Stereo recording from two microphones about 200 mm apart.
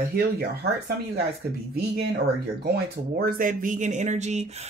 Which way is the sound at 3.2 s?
45° right (ahead or behind).